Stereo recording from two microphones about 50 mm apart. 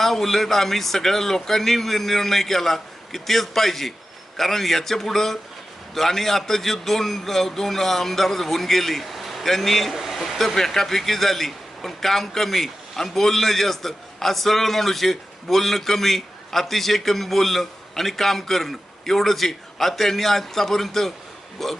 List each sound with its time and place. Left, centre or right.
0.0 s a man's voice: centre